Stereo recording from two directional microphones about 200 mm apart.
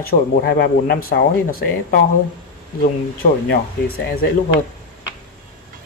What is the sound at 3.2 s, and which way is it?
Speech, 50° left (ahead or behind).